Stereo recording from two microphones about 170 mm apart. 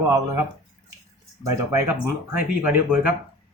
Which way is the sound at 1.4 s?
15° right (ahead or behind).